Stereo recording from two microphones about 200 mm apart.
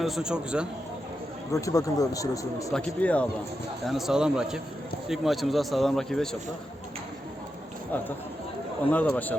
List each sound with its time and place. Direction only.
0.0 s a man's voice: centre (ahead or behind)
1.5 s speech: 15° left (ahead or behind)
2.7 s a man's voice: 5° left (ahead or behind)
8.9 s speech: 5° left (ahead or behind)